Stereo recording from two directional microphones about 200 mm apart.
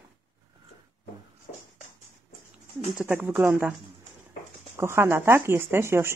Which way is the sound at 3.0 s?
10° right (ahead or behind).